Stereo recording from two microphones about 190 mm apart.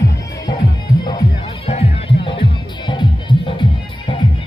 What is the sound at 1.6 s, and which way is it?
Music, 30° left (ahead or behind).